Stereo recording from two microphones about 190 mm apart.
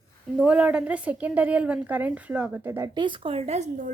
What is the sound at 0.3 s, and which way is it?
A woman's voice, 5° right (ahead or behind).